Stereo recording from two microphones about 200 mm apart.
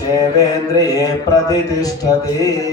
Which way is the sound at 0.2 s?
20° left (ahead or behind).